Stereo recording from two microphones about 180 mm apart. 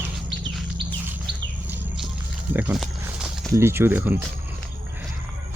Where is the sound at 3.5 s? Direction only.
15° right (ahead or behind).